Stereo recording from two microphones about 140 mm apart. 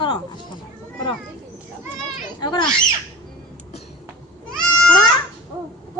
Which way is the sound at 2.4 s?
30° left (ahead or behind).